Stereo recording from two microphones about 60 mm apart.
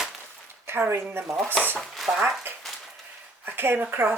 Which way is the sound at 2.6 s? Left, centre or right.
Centre.